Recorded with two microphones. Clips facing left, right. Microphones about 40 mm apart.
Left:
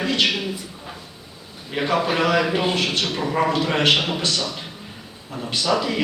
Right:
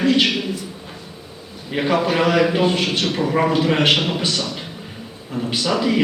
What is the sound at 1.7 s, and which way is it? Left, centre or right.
A man's voice, centre.